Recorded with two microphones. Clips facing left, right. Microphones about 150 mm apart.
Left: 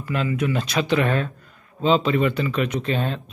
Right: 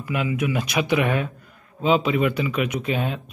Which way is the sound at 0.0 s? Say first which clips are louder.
Left 1 dB; 10° right (ahead or behind).